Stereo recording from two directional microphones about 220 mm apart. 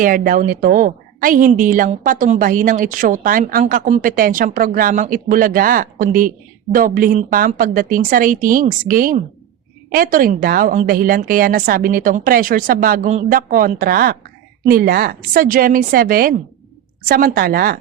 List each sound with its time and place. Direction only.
0.0 s a woman's voice: 40° right (ahead or behind)